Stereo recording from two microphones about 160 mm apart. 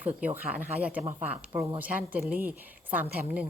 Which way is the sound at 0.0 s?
10° right (ahead or behind).